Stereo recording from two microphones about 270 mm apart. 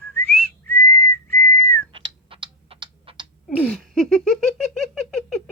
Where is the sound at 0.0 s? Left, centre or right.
Centre.